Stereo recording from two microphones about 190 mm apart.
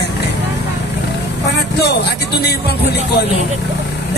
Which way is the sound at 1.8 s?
60° left (ahead or behind).